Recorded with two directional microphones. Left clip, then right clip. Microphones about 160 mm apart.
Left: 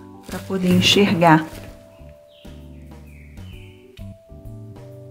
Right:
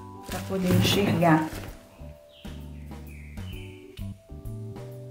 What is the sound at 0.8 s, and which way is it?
Speech, 85° left.